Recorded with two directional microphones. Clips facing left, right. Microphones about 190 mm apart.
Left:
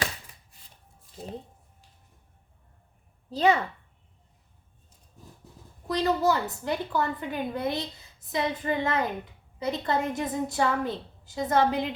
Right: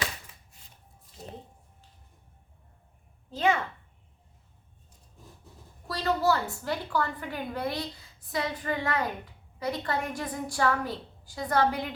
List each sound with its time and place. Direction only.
3.2 s a child's voice: 35° left (ahead or behind)
5.9 s a woman's voice: 20° left (ahead or behind)